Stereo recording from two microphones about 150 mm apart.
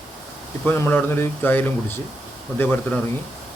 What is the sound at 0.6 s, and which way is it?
A man's voice, 15° left (ahead or behind).